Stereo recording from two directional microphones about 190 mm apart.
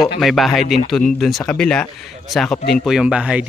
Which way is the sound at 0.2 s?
Centre (ahead or behind).